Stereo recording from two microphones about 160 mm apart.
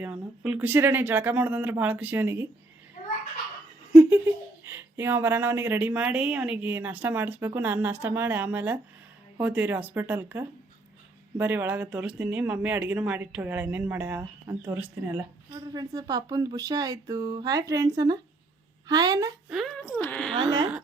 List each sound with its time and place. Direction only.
0.0 s speech: 5° right (ahead or behind)
4.6 s speech: 15° right (ahead or behind)
19.5 s speech: centre (ahead or behind)
19.8 s a woman's voice: 10° left (ahead or behind)
20.3 s speech: 30° right (ahead or behind)